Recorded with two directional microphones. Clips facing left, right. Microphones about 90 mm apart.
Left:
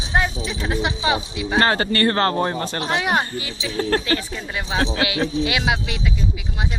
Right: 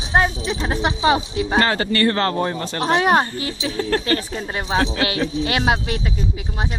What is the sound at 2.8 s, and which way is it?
Speech, 35° right (ahead or behind).